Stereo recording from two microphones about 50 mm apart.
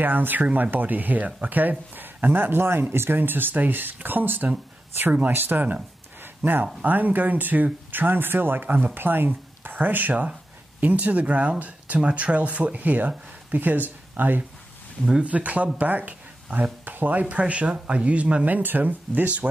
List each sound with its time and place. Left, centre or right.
0.0 s speech: right
6.2 s a sound: right
6.8 s speech: right
15.2 s speech: right